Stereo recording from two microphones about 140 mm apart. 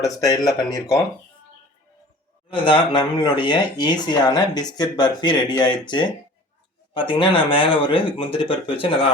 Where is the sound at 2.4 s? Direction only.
35° left (ahead or behind).